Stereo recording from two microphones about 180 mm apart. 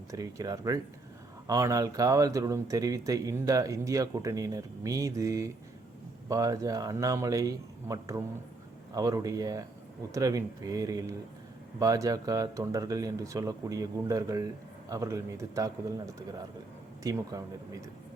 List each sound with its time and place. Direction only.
0.1 s speech: 20° right (ahead or behind)
17.0 s speech: 20° right (ahead or behind)